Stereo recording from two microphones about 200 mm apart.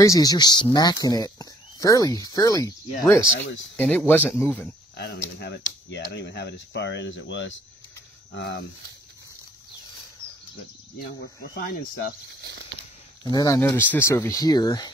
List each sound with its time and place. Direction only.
0.0 s speech: 15° left (ahead or behind)
3.3 s speech: 65° left (ahead or behind)
3.7 s speech: 10° left (ahead or behind)
4.9 s speech: 55° left (ahead or behind)
8.3 s speech: 55° left (ahead or behind)
10.2 s bird: 15° right (ahead or behind)
11.5 s speech: 45° left (ahead or behind)
12.3 s speech: 60° right (ahead or behind)
13.2 s speech: 20° left (ahead or behind)